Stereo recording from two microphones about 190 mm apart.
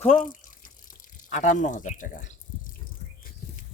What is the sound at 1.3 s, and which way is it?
Speech, 40° left (ahead or behind).